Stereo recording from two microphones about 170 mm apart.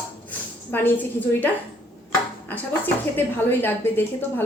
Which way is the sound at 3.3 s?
10° left (ahead or behind).